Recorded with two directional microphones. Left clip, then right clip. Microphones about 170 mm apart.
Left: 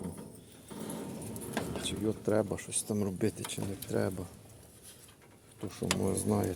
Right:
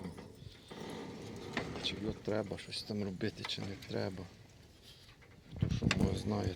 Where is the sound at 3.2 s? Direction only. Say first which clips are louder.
Left 5 dB; 15° left (ahead or behind).